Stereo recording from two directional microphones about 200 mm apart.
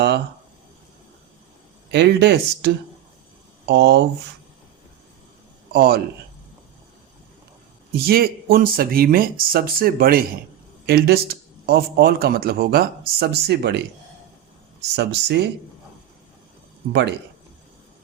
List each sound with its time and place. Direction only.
1.9 s speech: 55° right (ahead or behind)
5.7 s speech: 50° right (ahead or behind)
7.9 s a man's voice: 50° right (ahead or behind)
14.9 s speech: 60° right (ahead or behind)
16.9 s speech: 60° right (ahead or behind)